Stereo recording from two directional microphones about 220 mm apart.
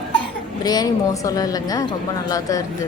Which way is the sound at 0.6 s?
15° left (ahead or behind).